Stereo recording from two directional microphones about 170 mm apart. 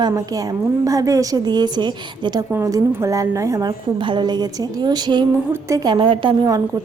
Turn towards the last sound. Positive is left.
turn(degrees=-25)  # may be behind; listen again after turning